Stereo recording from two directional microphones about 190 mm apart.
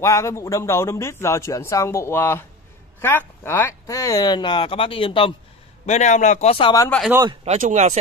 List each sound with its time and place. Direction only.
0.0 s speech: 15° left (ahead or behind)
5.9 s a man's voice: 40° left (ahead or behind); by 6.9 s 25° left (ahead or behind)
7.4 s speech: 35° right (ahead or behind)